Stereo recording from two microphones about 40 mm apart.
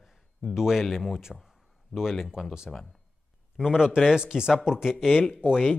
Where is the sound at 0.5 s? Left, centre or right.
Centre.